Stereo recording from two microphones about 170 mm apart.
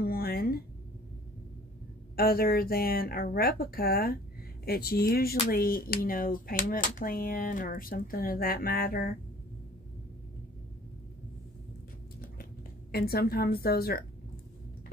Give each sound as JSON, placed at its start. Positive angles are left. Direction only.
{"t": 0.0, "sound": "a sound", "side_deg": 65}
{"t": 2.1, "sound": "speech", "side_deg": 60}
{"t": 12.9, "sound": "speech", "side_deg": 65}